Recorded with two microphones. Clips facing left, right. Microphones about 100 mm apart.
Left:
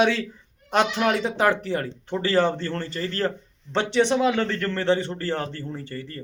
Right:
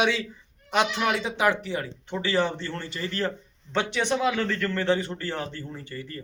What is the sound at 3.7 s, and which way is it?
A man's voice, 25° left (ahead or behind).